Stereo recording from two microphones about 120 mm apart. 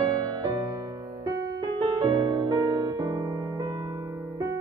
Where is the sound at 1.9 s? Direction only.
35° right (ahead or behind).